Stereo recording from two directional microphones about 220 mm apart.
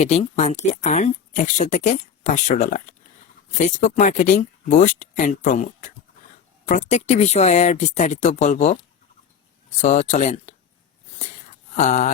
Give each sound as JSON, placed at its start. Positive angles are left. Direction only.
{"t": 0.0, "sound": "speech", "side_deg": 30}
{"t": 9.8, "sound": "speech", "side_deg": 30}
{"t": 11.7, "sound": "a sound", "side_deg": 35}